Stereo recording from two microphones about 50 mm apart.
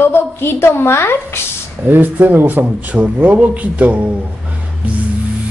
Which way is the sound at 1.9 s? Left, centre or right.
Right.